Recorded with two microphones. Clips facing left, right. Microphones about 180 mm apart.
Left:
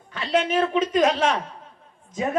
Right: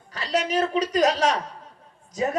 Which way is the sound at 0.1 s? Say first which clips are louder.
Left 2 dB; 35° right (ahead or behind).